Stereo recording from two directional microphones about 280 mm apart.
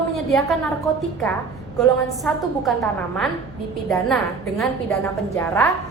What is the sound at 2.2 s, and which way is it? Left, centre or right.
A woman's voice, centre.